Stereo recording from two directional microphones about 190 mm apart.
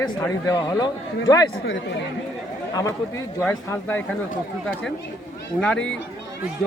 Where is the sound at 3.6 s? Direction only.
10° left (ahead or behind).